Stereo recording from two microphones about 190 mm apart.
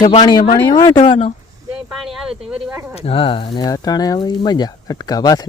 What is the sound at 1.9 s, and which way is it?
Speech, centre (ahead or behind).